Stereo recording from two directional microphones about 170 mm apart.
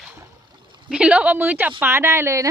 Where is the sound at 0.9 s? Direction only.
5° right (ahead or behind).